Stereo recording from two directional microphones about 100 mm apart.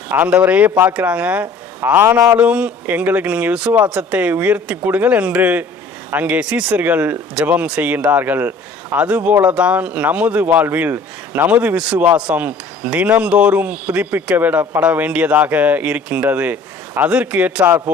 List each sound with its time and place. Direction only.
0.1 s speech: 15° right (ahead or behind)
2.4 s speech: 10° right (ahead or behind)